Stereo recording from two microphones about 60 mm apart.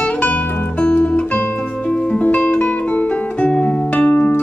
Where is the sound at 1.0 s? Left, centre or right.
Centre.